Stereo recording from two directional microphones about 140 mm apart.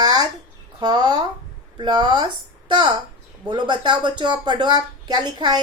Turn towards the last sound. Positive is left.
turn(degrees=-30)  # may be behind; listen again after turning